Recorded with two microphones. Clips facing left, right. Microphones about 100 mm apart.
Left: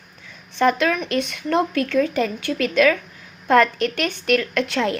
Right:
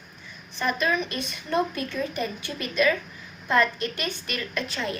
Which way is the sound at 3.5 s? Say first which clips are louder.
Left 7 dB; 70° left (ahead or behind).